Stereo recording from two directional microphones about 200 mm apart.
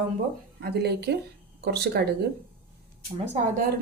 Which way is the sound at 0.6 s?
55° right (ahead or behind).